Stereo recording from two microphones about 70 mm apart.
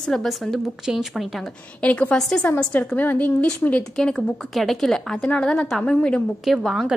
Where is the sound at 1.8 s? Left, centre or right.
Centre.